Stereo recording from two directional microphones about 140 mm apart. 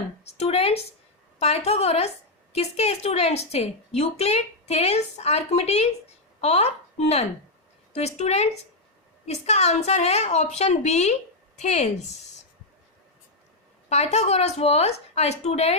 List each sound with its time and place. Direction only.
0.3 s a woman's voice: 50° left (ahead or behind)
13.9 s a woman's voice: 50° left (ahead or behind)